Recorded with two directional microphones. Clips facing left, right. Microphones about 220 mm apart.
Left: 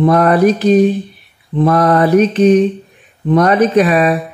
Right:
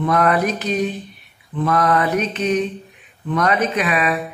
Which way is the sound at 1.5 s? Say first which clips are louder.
Left 7 dB; 30° left (ahead or behind).